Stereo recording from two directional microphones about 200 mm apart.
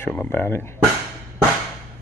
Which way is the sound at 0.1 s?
10° left (ahead or behind).